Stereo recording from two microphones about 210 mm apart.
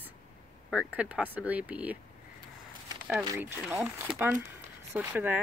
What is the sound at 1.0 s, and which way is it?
Speech, 5° right (ahead or behind).